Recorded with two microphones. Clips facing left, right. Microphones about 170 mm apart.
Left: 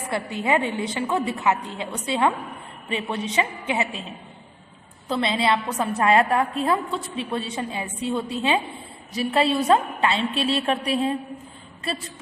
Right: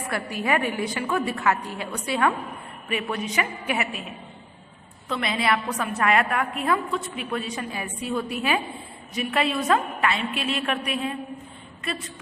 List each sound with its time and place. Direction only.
0.1 s a woman's voice: 25° left (ahead or behind)
5.0 s a woman's voice: 30° left (ahead or behind)